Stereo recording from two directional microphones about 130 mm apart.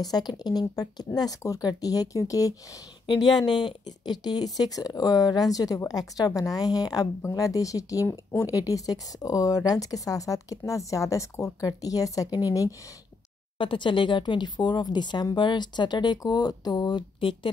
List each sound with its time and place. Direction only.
0.0 s speech: 30° left (ahead or behind)
13.6 s speech: 40° left (ahead or behind)